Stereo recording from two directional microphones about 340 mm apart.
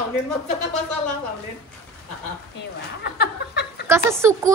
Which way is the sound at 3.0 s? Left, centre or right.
Left.